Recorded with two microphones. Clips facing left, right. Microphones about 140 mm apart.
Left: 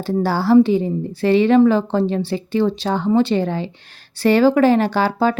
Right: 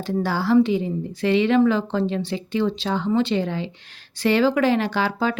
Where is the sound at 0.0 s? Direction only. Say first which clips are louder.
Left 4 dB; 35° left (ahead or behind).